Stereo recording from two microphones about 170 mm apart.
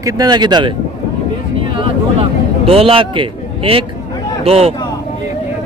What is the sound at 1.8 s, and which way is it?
A man's voice, 35° right (ahead or behind).